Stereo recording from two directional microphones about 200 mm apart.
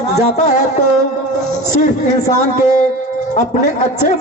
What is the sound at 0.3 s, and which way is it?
Speech, 35° left (ahead or behind).